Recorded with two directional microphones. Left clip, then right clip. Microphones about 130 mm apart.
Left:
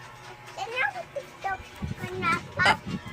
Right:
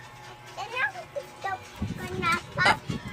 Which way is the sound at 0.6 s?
15° left (ahead or behind).